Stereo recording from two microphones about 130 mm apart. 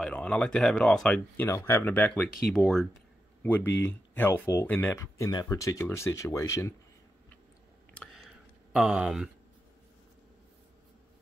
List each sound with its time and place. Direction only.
0.0 s speech: 10° left (ahead or behind)
3.4 s speech: 15° left (ahead or behind)
8.7 s speech: 5° right (ahead or behind)